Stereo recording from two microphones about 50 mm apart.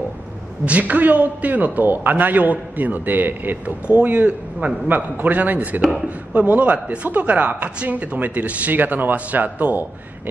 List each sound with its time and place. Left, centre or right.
0.7 s speech: right
5.8 s speech: centre
6.0 s speech: right